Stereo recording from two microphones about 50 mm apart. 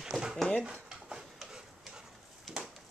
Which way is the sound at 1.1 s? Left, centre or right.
Centre.